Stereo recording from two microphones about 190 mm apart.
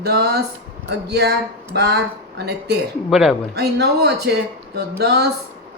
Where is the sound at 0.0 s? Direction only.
55° right (ahead or behind).